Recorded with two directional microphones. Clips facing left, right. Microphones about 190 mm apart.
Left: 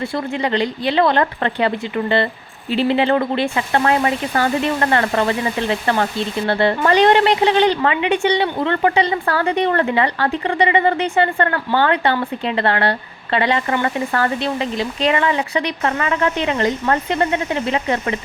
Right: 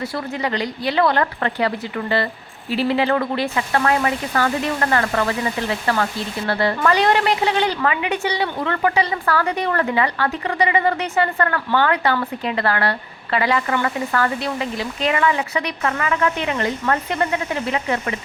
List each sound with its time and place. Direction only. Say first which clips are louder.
0.4 s a woman's voice: left 4 dB; 30° left (ahead or behind)
6.5 s a woman's voice: left 2 dB; 25° left (ahead or behind)